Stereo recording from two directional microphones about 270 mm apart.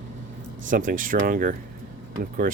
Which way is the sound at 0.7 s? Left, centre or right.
Right.